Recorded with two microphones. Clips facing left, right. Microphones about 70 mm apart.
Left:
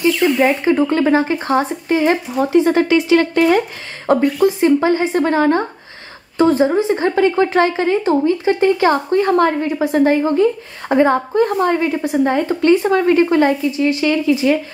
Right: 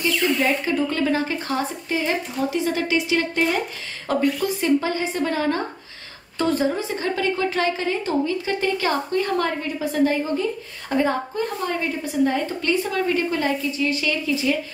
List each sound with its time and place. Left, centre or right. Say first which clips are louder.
0.2 s a woman's voice: left 6 dB; left
2.9 s speech: left 9 dB; left
4.1 s a woman's voice: left 8 dB; left
13.9 s speech: left 8 dB; left